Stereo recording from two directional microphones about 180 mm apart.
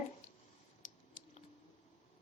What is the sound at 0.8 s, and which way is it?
Mechanisms, 45° left (ahead or behind).